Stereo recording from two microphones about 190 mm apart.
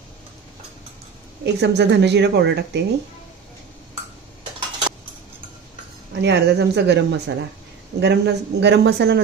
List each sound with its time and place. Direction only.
1.4 s speech: 60° right (ahead or behind)
4.6 s cutlery: 25° right (ahead or behind)
6.2 s speech: 60° right (ahead or behind)